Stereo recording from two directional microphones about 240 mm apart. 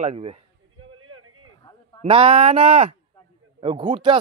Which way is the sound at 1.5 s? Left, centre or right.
Centre.